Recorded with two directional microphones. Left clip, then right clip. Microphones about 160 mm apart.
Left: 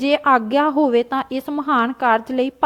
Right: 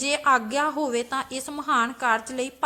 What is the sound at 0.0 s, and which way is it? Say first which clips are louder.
A woman's voice: left 6 dB; 45° left (ahead or behind).